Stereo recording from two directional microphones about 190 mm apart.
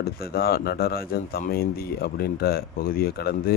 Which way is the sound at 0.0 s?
55° left (ahead or behind).